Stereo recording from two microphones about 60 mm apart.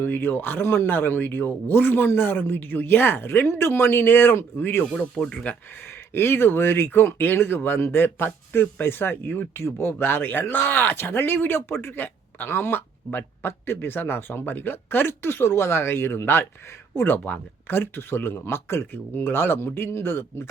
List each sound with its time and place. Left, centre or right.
0.0 s speech: left
5.2 s speech: centre
6.1 s speech: left